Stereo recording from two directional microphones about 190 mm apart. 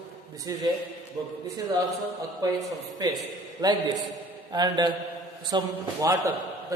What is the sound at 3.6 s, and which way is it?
A man's voice, 20° right (ahead or behind).